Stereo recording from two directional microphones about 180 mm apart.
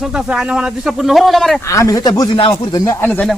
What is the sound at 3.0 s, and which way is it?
Speech, 5° left (ahead or behind).